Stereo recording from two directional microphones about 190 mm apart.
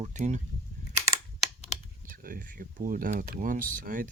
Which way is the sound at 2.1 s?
50° right (ahead or behind).